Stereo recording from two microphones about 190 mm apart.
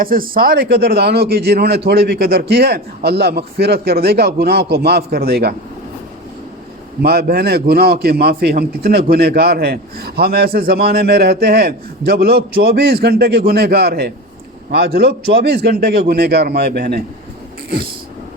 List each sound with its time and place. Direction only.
0.0 s a man's voice: 50° right (ahead or behind)
7.0 s a man's voice: 55° right (ahead or behind)